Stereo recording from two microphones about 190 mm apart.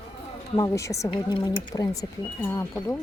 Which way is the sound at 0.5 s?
15° left (ahead or behind).